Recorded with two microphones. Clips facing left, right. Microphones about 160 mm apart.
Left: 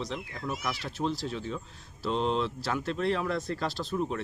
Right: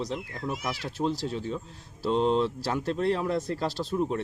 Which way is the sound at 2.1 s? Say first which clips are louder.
Right 4 dB; 20° right (ahead or behind).